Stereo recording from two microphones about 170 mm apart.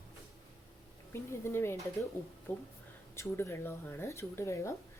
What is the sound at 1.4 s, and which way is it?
A woman's voice, 15° left (ahead or behind).